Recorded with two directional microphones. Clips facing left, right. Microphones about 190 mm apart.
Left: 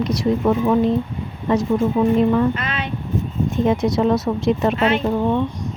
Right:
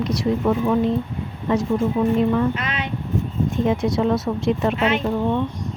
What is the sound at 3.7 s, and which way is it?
Speech, 40° left (ahead or behind).